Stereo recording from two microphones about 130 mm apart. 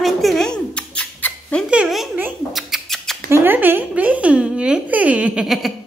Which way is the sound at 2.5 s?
Centre (ahead or behind).